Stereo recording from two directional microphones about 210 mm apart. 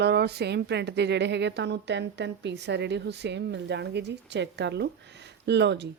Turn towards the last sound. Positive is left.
turn(degrees=-55)  # may be behind; listen again after turning